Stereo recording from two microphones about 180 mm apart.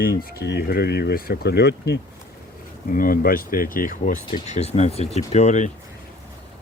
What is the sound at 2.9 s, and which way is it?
Speech, 50° left (ahead or behind).